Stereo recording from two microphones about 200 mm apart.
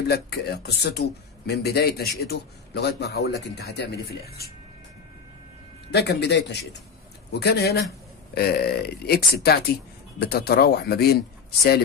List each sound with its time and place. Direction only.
0.1 s speech: 50° left (ahead or behind)
5.9 s a man's voice: 55° left (ahead or behind)